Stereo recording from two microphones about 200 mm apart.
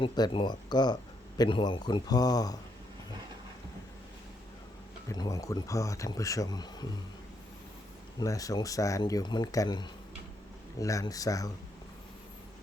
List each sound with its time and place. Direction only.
0.0 s a man's voice: 25° left (ahead or behind)
5.0 s speech: 20° left (ahead or behind)
8.2 s speech: 15° left (ahead or behind)